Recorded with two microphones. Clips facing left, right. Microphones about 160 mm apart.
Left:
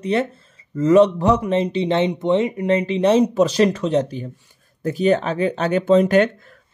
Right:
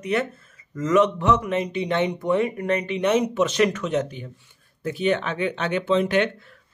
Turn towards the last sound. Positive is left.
turn(degrees=45)  # may be behind; listen again after turning